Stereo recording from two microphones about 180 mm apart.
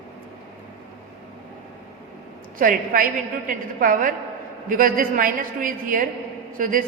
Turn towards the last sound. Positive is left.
turn(degrees=-50)  # may be behind; listen again after turning